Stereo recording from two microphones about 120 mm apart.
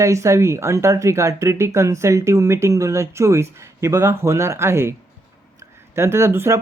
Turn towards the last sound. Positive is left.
turn(degrees=-20)  # may be behind; listen again after turning